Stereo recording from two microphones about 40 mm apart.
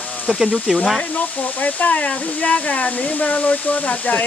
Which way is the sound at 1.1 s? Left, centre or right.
Left.